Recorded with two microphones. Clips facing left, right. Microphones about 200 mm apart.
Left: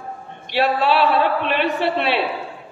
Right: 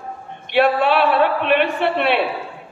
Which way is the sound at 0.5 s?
55° right (ahead or behind).